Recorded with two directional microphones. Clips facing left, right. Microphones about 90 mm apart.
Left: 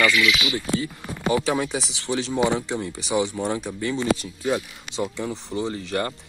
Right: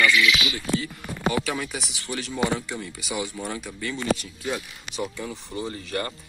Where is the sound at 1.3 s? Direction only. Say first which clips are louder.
Left 5 dB; 25° left (ahead or behind).